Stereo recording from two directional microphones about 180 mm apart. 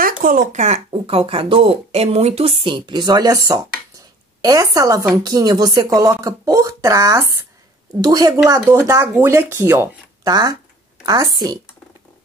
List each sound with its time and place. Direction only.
0.0 s speech: 50° right (ahead or behind); by 11.6 s 25° right (ahead or behind)